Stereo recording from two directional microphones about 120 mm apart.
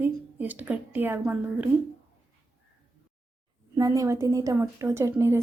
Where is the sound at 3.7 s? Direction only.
30° right (ahead or behind).